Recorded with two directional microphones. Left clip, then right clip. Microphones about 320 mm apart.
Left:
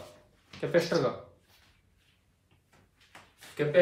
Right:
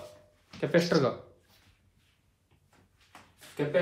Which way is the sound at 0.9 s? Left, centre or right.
Right.